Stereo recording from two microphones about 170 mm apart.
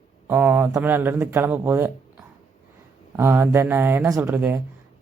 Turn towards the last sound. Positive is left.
turn(degrees=-10)  # may be behind; listen again after turning